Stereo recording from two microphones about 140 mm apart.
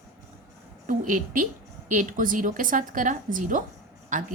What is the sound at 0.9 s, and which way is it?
A woman's voice, 70° right (ahead or behind).